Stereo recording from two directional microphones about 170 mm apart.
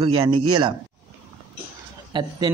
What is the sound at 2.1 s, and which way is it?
Speech, 25° right (ahead or behind).